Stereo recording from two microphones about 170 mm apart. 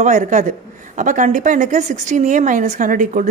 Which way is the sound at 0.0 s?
45° right (ahead or behind).